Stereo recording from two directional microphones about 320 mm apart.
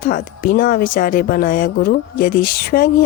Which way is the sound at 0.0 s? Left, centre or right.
Left.